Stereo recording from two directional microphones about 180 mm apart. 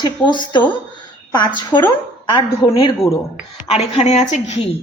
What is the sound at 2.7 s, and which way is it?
A woman's voice, 30° left (ahead or behind).